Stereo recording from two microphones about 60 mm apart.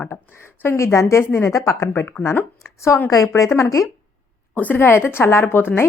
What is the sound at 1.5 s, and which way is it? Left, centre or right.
Speech, left.